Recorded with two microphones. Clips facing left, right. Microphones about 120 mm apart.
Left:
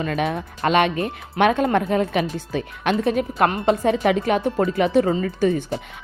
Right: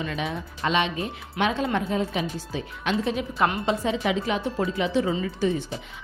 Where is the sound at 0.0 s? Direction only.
55° left (ahead or behind).